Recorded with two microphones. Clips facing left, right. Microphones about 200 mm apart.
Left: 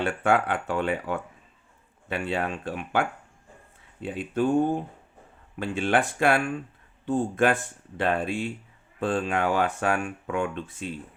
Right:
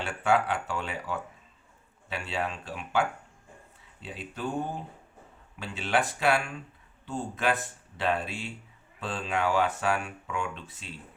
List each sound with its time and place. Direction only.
0.0 s speech: 55° left (ahead or behind)